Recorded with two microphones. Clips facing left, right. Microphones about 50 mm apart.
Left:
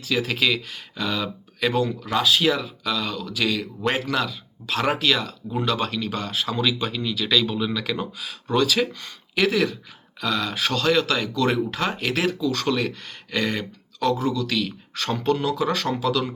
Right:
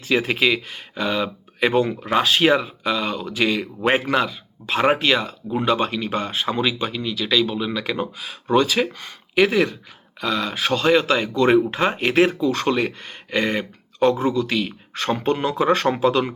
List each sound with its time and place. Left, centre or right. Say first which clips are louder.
0.0 s speech: right 4 dB; right
1.8 s speech: right 3 dB; right
2.8 s speech: right 4 dB; right
6.8 s speech: right 1 dB; centre; by 16.3 s right